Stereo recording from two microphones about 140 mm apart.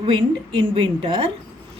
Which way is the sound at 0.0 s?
35° right (ahead or behind).